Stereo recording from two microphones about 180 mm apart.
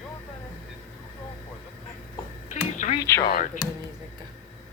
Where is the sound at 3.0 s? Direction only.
15° left (ahead or behind).